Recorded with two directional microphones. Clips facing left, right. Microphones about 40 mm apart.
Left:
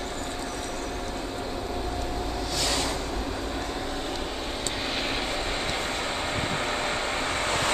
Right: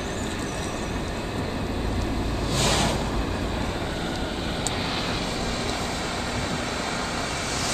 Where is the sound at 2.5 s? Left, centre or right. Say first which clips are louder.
Right 5 dB; right.